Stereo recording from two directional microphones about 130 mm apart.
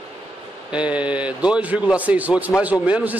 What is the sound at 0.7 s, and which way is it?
A man's voice, 10° right (ahead or behind).